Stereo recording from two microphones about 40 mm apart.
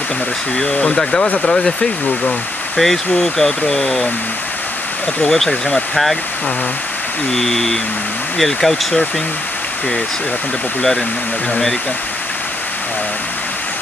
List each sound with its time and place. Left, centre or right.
0.6 s speech: centre
2.8 s speech: centre
5.2 s speech: centre
7.3 s speech: centre